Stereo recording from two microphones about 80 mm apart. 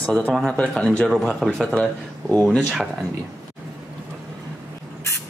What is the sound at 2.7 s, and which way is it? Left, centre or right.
Speech, centre.